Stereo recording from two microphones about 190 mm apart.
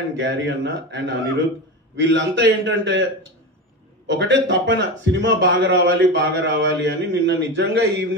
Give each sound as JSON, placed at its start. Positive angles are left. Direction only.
{"t": 0.2, "sound": "a man's voice", "side_deg": -70}
{"t": 4.1, "sound": "a man's voice", "side_deg": -65}